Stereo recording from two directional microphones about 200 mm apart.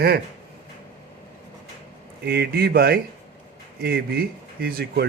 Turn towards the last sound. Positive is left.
turn(degrees=-50)  # may be behind; listen again after turning